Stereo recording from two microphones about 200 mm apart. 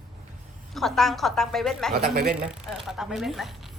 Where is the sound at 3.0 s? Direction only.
Centre (ahead or behind).